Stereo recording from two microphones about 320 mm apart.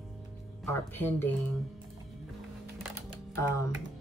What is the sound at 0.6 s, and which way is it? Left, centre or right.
Speech, centre.